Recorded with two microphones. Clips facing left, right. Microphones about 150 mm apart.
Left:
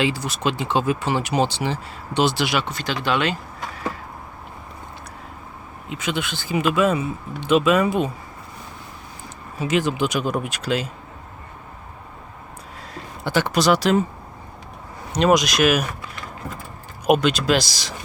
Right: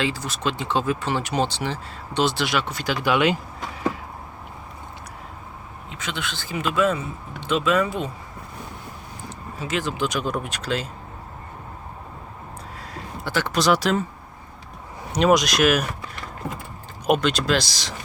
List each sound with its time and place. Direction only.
0.0 s speech: 10° left (ahead or behind)
2.7 s speech: 10° right (ahead or behind)
5.9 s speech: 10° left (ahead or behind)
9.6 s speech: 15° left (ahead or behind)
13.2 s speech: 15° left (ahead or behind)
13.5 s speech: centre (ahead or behind)
15.1 s speech: centre (ahead or behind)
17.1 s speech: 5° left (ahead or behind)